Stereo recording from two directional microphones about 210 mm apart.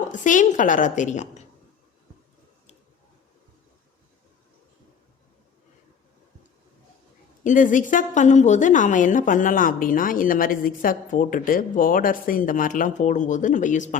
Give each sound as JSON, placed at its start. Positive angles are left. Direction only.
{"t": 0.1, "sound": "a woman's voice", "side_deg": 35}
{"t": 7.4, "sound": "a woman's voice", "side_deg": 40}